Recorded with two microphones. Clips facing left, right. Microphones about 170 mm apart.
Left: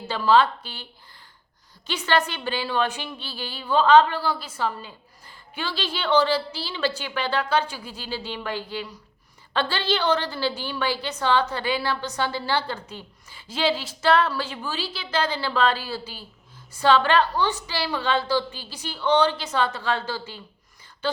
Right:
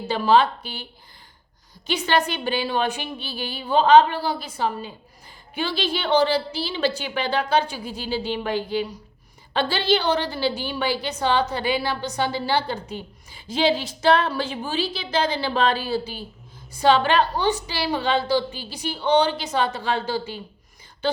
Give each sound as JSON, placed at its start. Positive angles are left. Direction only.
{"t": 0.1, "sound": "a woman's voice", "side_deg": -15}
{"t": 1.9, "sound": "a woman's voice", "side_deg": -15}